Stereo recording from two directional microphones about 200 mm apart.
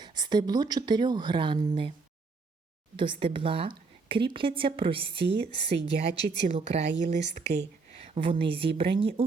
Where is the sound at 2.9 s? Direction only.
25° right (ahead or behind).